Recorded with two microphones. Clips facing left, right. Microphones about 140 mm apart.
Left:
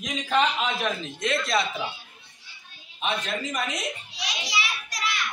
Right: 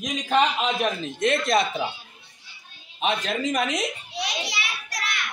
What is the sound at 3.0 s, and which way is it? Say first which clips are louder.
Speech: right 4 dB; 90° right.